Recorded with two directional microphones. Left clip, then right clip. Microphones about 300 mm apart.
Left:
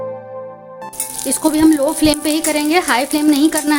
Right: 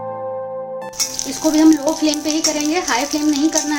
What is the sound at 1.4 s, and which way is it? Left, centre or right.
Stir, left.